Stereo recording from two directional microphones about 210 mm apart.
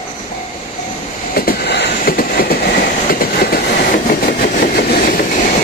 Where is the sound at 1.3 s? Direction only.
45° left (ahead or behind).